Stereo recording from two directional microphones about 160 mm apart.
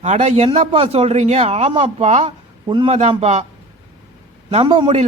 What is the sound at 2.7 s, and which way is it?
Speech, 30° right (ahead or behind).